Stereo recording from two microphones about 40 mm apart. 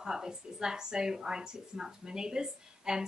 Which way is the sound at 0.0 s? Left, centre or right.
Centre.